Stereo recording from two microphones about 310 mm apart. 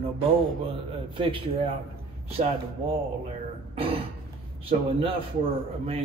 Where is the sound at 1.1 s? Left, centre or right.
Centre.